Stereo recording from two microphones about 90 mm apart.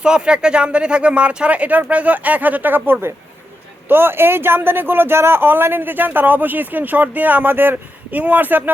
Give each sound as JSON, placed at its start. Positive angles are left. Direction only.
{"t": 0.0, "sound": "speech", "side_deg": -10}